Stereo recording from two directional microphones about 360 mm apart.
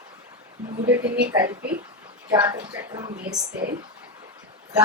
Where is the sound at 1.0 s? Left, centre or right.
Right.